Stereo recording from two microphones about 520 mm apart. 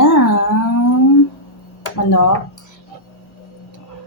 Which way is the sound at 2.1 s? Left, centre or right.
Left.